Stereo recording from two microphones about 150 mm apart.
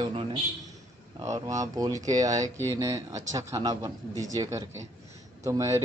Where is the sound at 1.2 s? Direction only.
20° right (ahead or behind).